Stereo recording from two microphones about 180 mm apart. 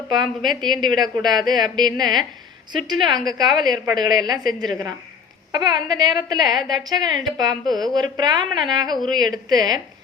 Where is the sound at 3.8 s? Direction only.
20° right (ahead or behind).